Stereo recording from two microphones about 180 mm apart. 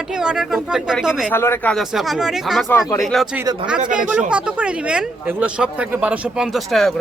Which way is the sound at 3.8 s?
45° right (ahead or behind).